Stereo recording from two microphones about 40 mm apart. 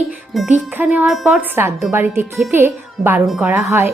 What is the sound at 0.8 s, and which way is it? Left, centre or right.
Speech, right.